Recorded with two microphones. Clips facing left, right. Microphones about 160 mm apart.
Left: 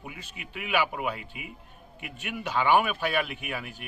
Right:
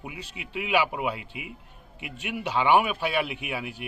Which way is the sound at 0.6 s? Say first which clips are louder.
Right 3 dB; 20° right (ahead or behind).